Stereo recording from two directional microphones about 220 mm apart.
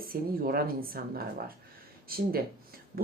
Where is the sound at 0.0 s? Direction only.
40° right (ahead or behind).